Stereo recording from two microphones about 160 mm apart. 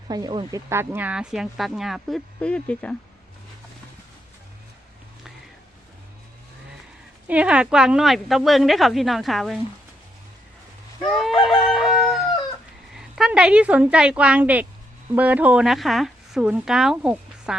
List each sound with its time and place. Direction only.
0.1 s speech: 25° right (ahead or behind)
0.7 s speech: 15° right (ahead or behind); by 2.9 s 5° left (ahead or behind)
7.3 s speech: 10° right (ahead or behind)
11.0 s chicken: centre (ahead or behind)
13.0 s a woman's voice: 5° right (ahead or behind)